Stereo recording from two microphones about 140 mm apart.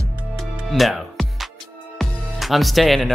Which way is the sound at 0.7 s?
Centre (ahead or behind).